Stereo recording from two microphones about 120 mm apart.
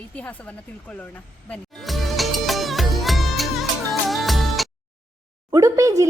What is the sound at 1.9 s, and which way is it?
Music, centre (ahead or behind).